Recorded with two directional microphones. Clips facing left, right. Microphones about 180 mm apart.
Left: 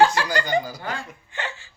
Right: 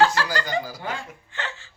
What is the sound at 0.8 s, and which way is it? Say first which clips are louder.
Speech: even; 20° right (ahead or behind).